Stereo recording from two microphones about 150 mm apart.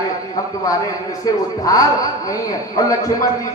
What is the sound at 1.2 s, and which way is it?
A man's voice, 25° left (ahead or behind).